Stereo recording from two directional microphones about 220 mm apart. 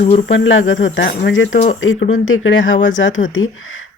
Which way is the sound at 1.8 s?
65° left (ahead or behind).